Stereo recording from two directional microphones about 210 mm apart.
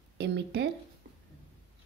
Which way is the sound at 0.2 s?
55° right (ahead or behind).